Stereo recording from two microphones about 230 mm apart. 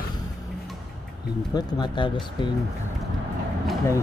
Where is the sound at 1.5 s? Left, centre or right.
Centre.